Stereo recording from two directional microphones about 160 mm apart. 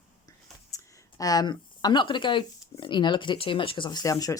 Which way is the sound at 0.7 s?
20° left (ahead or behind).